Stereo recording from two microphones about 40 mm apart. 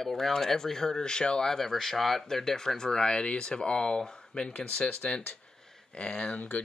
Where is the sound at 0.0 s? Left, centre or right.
Centre.